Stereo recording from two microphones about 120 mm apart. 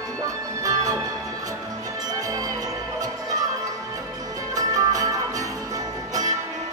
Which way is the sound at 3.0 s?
30° right (ahead or behind).